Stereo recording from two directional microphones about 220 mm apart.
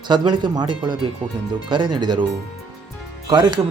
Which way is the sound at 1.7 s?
20° right (ahead or behind).